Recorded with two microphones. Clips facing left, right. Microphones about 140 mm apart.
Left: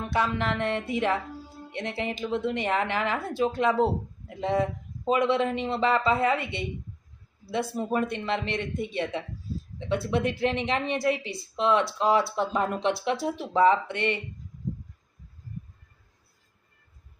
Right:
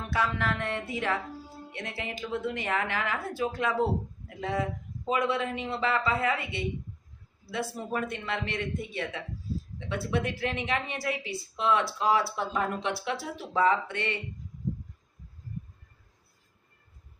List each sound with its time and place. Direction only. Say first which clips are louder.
0.1 s speech: left 2 dB; 20° left (ahead or behind)
7.7 s speech: left 5 dB; 20° left (ahead or behind)